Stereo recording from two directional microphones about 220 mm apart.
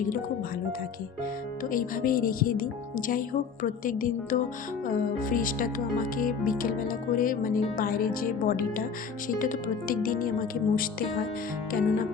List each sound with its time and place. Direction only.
1.7 s speech: 40° left (ahead or behind)